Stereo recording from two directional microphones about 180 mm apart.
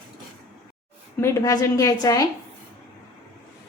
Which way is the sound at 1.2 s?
20° left (ahead or behind).